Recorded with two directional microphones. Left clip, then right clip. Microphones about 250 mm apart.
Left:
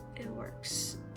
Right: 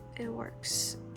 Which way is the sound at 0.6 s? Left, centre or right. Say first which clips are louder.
Right 4 dB; right.